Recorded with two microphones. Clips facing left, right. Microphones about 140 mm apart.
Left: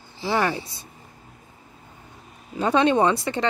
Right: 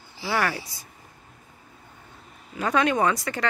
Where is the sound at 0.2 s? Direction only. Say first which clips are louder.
Left 3 dB; 20° left (ahead or behind).